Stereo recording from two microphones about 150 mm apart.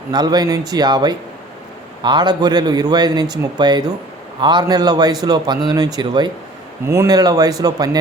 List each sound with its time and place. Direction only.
0.1 s a man's voice: 25° right (ahead or behind)
6.8 s a man's voice: 20° right (ahead or behind)